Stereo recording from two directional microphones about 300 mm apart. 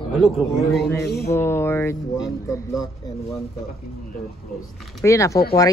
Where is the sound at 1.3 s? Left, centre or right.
Centre.